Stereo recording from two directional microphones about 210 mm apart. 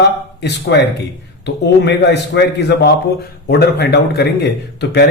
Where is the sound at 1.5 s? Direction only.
55° left (ahead or behind).